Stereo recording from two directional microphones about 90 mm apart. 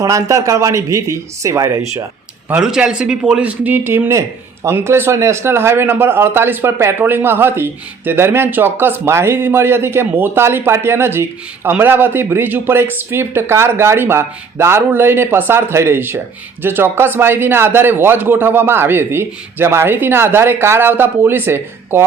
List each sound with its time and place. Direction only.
0.0 s speech: 40° right (ahead or behind)
2.5 s a man's voice: 10° right (ahead or behind); by 22.0 s 25° right (ahead or behind)